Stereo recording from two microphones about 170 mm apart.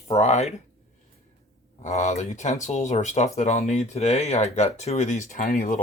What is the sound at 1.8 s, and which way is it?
Speech, 40° left (ahead or behind).